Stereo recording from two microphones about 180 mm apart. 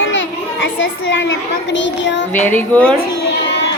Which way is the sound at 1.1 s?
85° left.